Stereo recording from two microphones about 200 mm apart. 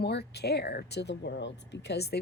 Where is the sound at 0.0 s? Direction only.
55° left (ahead or behind).